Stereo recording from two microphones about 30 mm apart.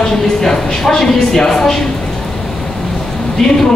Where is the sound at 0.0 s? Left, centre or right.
Centre.